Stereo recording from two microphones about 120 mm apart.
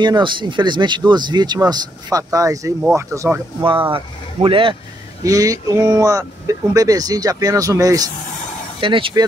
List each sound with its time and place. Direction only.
0.0 s speech: 40° right (ahead or behind); by 3.3 s 20° right (ahead or behind)
3.9 s speech: 45° right (ahead or behind)
5.2 s speech: 30° right (ahead or behind)
8.8 s speech: 45° right (ahead or behind)